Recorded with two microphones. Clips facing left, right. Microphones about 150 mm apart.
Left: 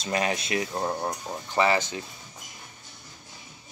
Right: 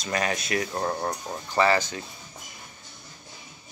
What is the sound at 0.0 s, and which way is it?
Speech, 25° left (ahead or behind).